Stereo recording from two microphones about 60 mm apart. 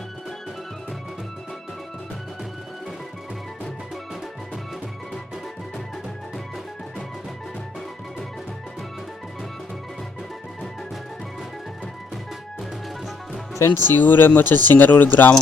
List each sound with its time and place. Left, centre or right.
13.7 s speech: left